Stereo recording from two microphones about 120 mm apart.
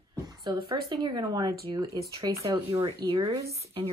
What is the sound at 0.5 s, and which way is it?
Speech, 40° right (ahead or behind).